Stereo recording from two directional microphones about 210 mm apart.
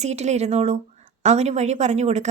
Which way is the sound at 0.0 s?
30° right (ahead or behind).